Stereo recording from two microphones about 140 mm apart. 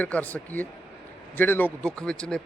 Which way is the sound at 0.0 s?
10° left (ahead or behind).